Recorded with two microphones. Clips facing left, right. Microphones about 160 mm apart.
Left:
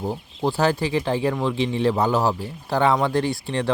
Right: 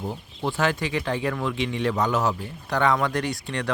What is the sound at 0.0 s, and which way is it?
Speech, 35° left (ahead or behind).